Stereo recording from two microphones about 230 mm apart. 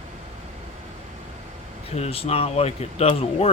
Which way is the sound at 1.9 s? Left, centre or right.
Left.